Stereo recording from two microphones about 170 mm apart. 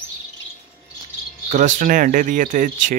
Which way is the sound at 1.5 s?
45° right (ahead or behind).